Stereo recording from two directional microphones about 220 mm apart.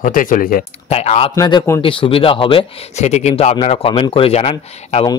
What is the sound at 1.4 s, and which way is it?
Speech, 15° left (ahead or behind).